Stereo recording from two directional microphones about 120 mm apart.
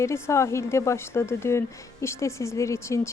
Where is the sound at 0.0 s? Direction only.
25° left (ahead or behind).